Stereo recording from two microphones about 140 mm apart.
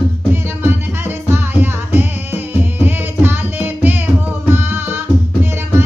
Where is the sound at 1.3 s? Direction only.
15° right (ahead or behind).